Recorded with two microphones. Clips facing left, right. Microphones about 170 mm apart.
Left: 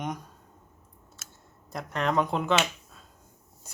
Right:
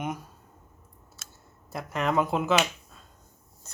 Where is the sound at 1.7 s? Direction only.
5° right (ahead or behind).